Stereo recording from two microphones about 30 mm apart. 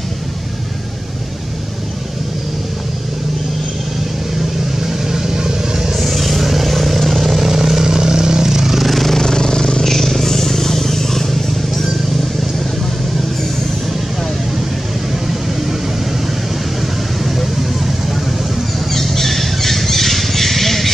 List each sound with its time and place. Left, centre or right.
4.8 s vehicle: centre
6.0 s vehicle: centre
9.1 s vehicle: centre
17.2 s vehicle: centre
18.9 s squawk: centre